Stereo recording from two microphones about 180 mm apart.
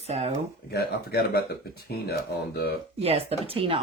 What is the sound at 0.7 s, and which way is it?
Speech, 60° left (ahead or behind).